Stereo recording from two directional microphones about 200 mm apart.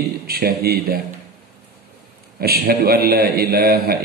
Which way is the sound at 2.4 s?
50° right (ahead or behind).